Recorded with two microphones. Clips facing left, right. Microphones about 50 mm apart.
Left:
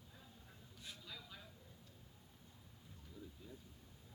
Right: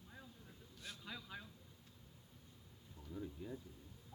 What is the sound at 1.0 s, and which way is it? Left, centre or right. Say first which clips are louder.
Vehicle: right 7 dB; right.